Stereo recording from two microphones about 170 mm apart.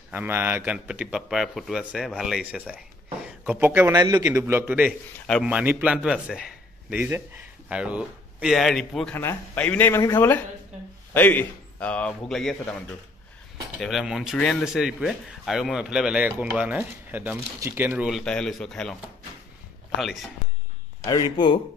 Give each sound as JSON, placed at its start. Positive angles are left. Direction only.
{"t": 0.1, "sound": "a man's voice", "side_deg": -10}
{"t": 9.1, "sound": "a man's voice", "side_deg": 15}
{"t": 13.7, "sound": "speech", "side_deg": 0}
{"t": 20.0, "sound": "speech", "side_deg": 0}
{"t": 21.0, "sound": "speech", "side_deg": 25}